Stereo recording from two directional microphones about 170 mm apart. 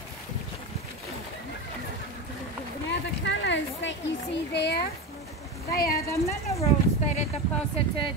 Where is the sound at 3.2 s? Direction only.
90° left.